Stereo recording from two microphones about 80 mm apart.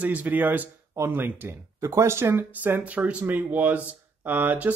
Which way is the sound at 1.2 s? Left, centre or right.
Right.